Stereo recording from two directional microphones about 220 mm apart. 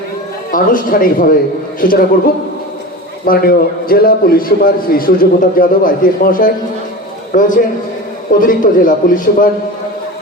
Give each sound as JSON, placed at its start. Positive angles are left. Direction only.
{"t": 0.5, "sound": "a man's voice", "side_deg": 40}